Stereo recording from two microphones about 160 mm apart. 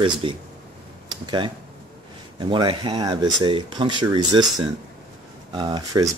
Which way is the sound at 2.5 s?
30° right (ahead or behind).